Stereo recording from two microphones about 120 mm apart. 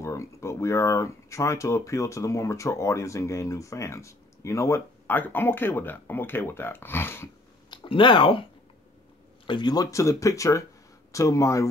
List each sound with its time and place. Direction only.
0.0 s speech: 25° left (ahead or behind)
7.7 s speech: 40° left (ahead or behind)
9.5 s speech: 35° left (ahead or behind)